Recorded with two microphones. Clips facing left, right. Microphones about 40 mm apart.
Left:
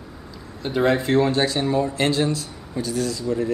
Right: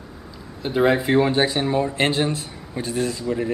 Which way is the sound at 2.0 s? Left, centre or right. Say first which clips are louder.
Even; right.